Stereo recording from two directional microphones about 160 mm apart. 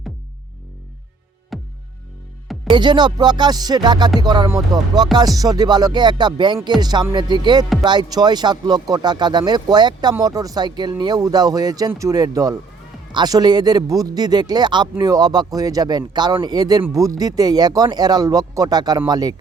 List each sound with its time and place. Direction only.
1.5 s music: centre (ahead or behind)
2.7 s speech: 30° right (ahead or behind)